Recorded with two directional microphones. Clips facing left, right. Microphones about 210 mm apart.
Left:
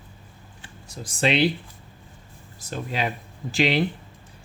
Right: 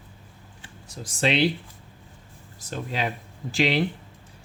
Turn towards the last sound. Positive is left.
turn(degrees=20)  # may be behind; listen again after turning